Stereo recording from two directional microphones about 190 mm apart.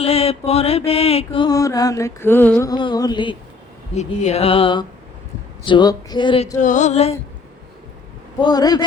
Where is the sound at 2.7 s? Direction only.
20° left (ahead or behind).